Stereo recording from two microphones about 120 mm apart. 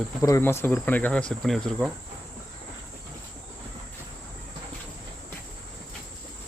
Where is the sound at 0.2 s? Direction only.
25° left (ahead or behind); by 1.9 s centre (ahead or behind).